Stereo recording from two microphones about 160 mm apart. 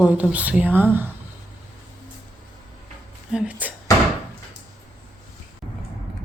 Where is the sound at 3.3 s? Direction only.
5° right (ahead or behind).